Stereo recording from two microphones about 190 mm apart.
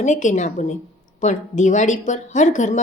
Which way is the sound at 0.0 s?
40° left (ahead or behind).